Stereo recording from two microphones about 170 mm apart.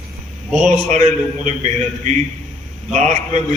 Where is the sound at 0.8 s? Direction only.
45° right (ahead or behind).